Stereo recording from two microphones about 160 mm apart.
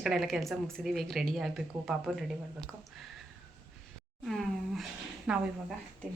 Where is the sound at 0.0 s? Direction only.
Centre (ahead or behind).